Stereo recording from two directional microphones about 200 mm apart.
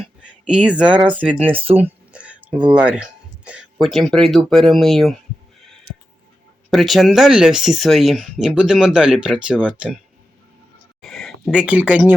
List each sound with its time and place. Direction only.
0.2 s speech: 5° right (ahead or behind)
1.5 s speech: 30° right (ahead or behind)
2.1 s speech: 5° right (ahead or behind)
6.7 s speech: centre (ahead or behind)
11.0 s a sound: centre (ahead or behind)